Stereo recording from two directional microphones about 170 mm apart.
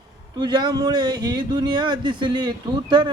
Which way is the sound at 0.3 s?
25° right (ahead or behind).